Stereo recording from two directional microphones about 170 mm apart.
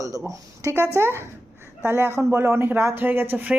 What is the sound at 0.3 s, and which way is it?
Speech, 15° right (ahead or behind).